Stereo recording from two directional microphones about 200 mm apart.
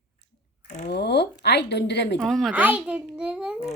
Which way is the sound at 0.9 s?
55° left (ahead or behind).